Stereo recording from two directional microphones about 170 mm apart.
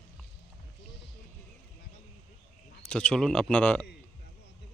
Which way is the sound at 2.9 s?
5° left (ahead or behind).